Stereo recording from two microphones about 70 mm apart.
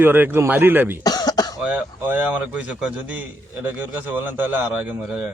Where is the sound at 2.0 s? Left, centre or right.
Right.